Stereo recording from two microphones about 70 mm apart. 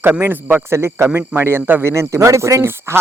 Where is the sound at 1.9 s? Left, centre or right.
Right.